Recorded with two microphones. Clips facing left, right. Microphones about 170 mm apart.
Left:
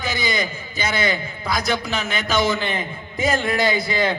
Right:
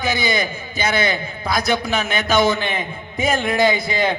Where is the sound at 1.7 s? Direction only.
20° right (ahead or behind).